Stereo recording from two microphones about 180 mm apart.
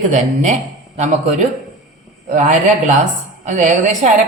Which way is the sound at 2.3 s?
40° right (ahead or behind).